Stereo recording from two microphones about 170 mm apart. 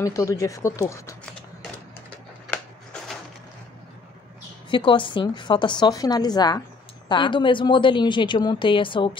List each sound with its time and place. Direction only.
0.0 s a woman's voice: 20° left (ahead or behind)
2.4 s a sound: 5° left (ahead or behind)
4.6 s a woman's voice: 30° left (ahead or behind)